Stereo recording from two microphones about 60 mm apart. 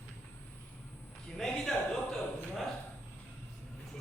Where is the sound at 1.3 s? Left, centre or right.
Centre.